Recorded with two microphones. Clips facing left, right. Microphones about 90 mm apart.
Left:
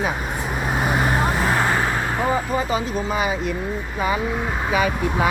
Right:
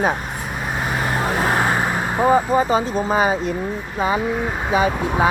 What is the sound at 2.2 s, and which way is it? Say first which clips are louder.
Speech: right 8 dB; 35° right (ahead or behind).